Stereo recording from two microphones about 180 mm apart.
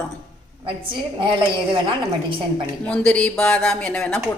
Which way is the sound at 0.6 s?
30° right (ahead or behind).